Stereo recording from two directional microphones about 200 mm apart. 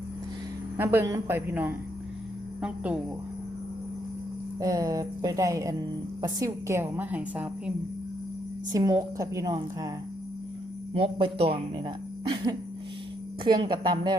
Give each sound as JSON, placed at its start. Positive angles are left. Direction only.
{"t": 0.8, "sound": "a woman's voice", "side_deg": -10}
{"t": 4.6, "sound": "a woman's voice", "side_deg": -15}
{"t": 8.7, "sound": "a woman's voice", "side_deg": -20}
{"t": 10.9, "sound": "speech", "side_deg": -25}